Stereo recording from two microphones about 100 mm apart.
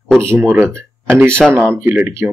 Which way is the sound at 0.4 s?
20° right (ahead or behind).